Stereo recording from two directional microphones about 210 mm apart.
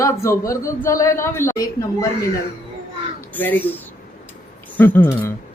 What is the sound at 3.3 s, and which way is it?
A man's voice, 10° left (ahead or behind).